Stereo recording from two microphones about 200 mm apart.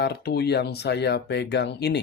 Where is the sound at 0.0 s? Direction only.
55° left (ahead or behind).